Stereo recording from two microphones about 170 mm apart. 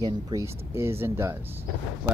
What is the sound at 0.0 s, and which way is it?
Speech, 20° right (ahead or behind).